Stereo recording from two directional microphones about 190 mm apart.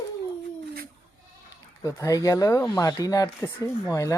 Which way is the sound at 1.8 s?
15° left (ahead or behind).